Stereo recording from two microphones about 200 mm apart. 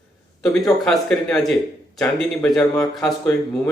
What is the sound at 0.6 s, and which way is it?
Speech, centre (ahead or behind).